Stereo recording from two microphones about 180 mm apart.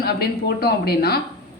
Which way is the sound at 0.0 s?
60° left (ahead or behind).